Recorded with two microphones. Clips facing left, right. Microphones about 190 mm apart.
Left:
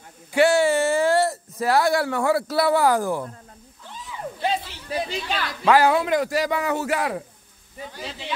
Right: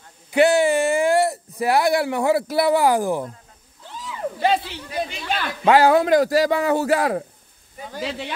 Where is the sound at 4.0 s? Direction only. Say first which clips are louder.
Right 5 dB; 90° right.